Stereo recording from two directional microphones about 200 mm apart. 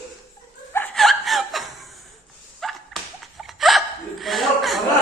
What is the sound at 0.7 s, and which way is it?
Laughter, 5° left (ahead or behind).